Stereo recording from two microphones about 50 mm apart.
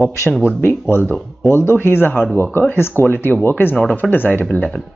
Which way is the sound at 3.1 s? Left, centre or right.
Left.